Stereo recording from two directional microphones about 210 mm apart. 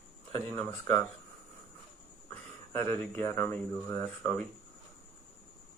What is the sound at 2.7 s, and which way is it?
Speech, 10° left (ahead or behind).